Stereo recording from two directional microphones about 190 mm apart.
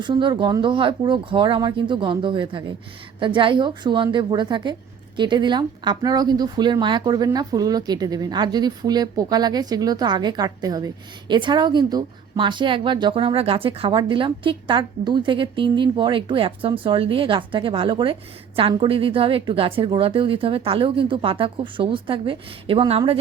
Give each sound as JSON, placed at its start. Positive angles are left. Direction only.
{"t": 0.0, "sound": "speech", "side_deg": -25}